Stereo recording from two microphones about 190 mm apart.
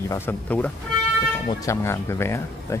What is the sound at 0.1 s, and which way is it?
Speech, 10° left (ahead or behind).